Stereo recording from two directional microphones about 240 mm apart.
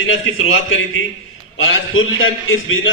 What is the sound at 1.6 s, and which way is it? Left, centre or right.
A man's voice, left.